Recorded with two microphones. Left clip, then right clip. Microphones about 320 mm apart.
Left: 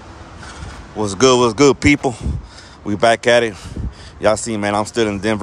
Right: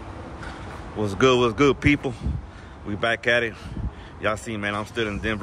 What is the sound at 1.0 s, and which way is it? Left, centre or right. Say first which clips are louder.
Speech: left 6 dB; centre.